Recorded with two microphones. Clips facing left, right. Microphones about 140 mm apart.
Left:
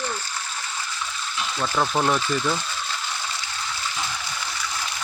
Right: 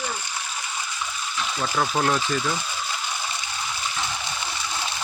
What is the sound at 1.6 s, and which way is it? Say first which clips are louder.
Speech: left 1 dB; 10° right (ahead or behind).